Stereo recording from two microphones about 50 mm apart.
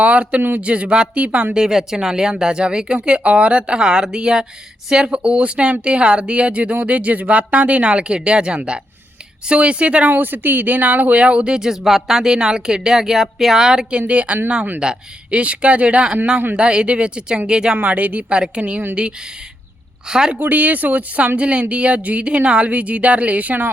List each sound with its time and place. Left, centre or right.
0.0 s speech: right
1.5 s speech: centre
10.1 s speech: right; by 14.0 s centre
14.1 s speech: right
17.8 s speech: right
18.6 s a woman's voice: right
20.1 s speech: centre
20.3 s speech: right